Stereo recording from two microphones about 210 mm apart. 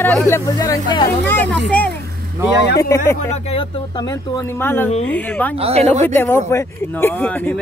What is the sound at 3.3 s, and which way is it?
Speech, 30° left (ahead or behind).